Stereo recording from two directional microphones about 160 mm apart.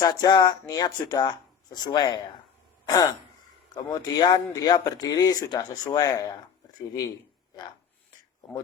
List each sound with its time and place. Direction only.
0.0 s speech: 25° left (ahead or behind)